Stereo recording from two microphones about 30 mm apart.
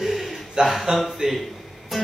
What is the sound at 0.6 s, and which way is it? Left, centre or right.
Speech, right.